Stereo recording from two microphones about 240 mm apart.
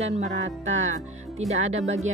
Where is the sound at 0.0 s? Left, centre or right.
Right.